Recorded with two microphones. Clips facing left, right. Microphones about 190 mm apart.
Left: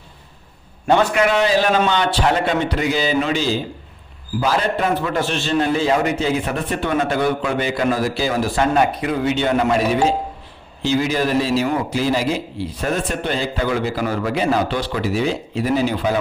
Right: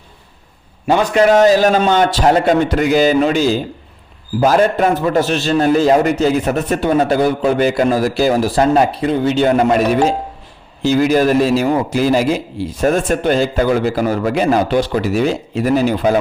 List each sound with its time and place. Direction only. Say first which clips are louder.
1.1 s a man's voice: right 7 dB; 40° right (ahead or behind)
10.8 s a man's voice: right 6 dB; 50° right (ahead or behind)